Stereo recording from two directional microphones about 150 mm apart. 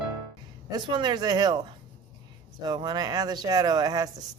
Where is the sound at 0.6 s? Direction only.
30° right (ahead or behind).